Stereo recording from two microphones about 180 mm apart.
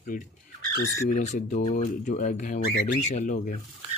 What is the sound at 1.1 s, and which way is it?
Speech, 40° left (ahead or behind).